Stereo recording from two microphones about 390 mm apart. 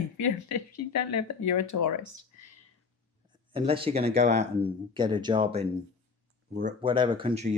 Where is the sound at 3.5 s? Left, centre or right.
Centre.